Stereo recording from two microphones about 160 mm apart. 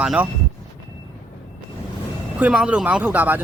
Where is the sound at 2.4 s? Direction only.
5° right (ahead or behind).